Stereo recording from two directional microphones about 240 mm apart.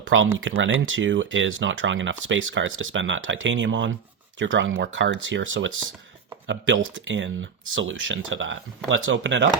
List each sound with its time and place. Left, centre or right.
0.1 s speech: right